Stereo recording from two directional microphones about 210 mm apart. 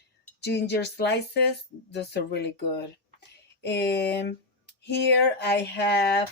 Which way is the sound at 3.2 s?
50° left (ahead or behind).